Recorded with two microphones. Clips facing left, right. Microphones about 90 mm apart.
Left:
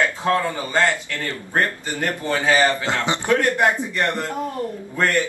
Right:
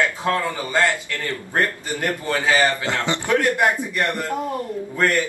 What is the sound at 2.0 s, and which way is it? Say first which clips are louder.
A man's voice: left 1 dB; 20° left (ahead or behind).